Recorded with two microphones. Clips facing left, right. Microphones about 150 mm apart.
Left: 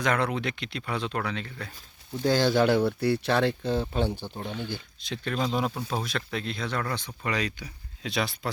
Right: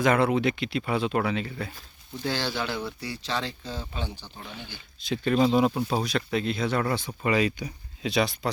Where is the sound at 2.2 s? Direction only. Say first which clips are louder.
Left 8 dB; 45° left (ahead or behind).